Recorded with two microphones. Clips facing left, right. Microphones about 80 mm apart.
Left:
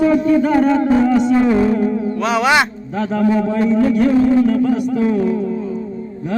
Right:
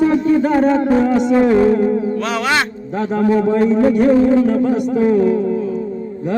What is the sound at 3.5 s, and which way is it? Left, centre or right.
A man's voice, right.